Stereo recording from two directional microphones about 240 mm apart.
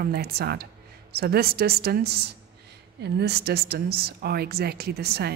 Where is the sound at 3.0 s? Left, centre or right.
Right.